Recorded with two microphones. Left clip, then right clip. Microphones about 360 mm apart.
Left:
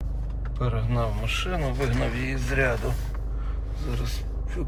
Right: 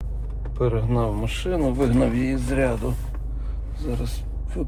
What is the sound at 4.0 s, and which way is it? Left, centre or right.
Speech, centre.